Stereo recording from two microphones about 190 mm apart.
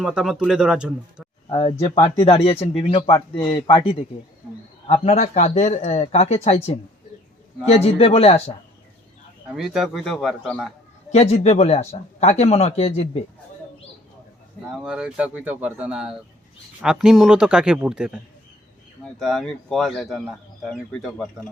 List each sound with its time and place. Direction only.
0.0 s speech: 5° right (ahead or behind)
1.5 s speech: 35° left (ahead or behind)
9.5 s speech: centre (ahead or behind)
11.1 s speech: 35° left (ahead or behind)
14.8 s speech: 5° right (ahead or behind)